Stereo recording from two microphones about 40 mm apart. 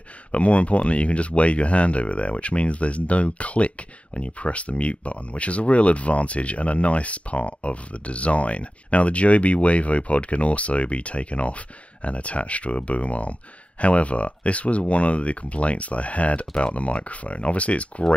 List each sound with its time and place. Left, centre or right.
0.3 s speech: left